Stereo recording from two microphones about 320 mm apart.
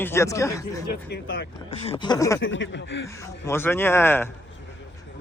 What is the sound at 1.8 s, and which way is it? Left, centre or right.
Speech, centre.